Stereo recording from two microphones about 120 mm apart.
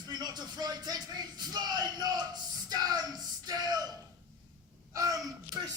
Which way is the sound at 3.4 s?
35° right (ahead or behind).